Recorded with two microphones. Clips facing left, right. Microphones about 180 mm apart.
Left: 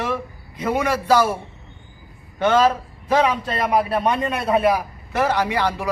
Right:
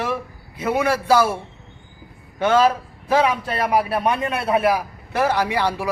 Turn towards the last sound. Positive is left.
turn(degrees=-10)  # may be behind; listen again after turning